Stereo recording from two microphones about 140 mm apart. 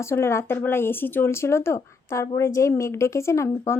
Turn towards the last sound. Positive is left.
turn(degrees=20)  # may be behind; listen again after turning